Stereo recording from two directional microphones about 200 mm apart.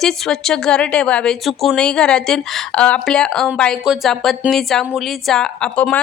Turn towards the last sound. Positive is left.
turn(degrees=5)  # may be behind; listen again after turning